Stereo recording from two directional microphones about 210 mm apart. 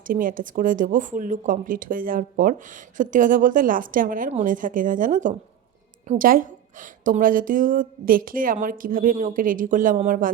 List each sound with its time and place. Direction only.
0.1 s speech: 40° right (ahead or behind)